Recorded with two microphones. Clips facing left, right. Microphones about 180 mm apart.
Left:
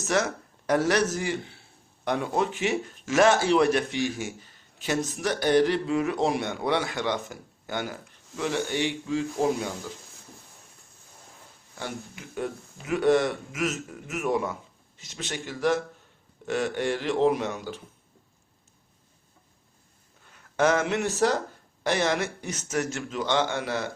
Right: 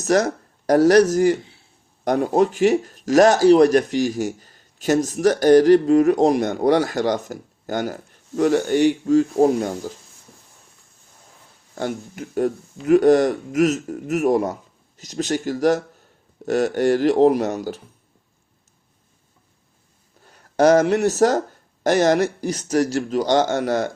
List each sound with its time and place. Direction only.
0.0 s speech: 40° right (ahead or behind)
11.7 s speech: 45° right (ahead or behind)
20.2 s speech: 40° right (ahead or behind)